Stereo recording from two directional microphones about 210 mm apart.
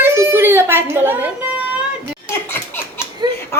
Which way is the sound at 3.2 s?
20° right (ahead or behind).